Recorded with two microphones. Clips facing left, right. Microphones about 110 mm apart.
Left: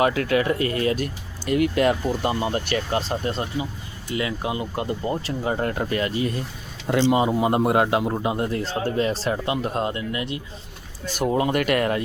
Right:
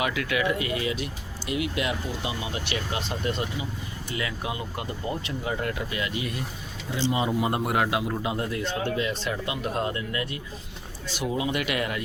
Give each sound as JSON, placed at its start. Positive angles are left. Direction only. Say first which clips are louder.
{"t": 0.0, "sound": "speech", "louder": "left 6 dB", "side_deg": 40}
{"t": 6.8, "sound": "speech", "louder": "left 8 dB", "side_deg": 65}
{"t": 7.1, "sound": "a man's voice", "louder": "left 3 dB", "side_deg": 30}
{"t": 11.0, "sound": "speech", "louder": "left 6 dB", "side_deg": 50}